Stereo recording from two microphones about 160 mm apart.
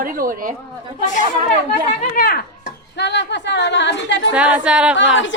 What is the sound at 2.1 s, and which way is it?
Speech, 65° left (ahead or behind).